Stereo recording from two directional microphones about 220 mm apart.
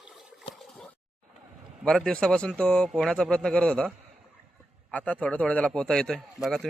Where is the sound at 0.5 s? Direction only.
Centre (ahead or behind).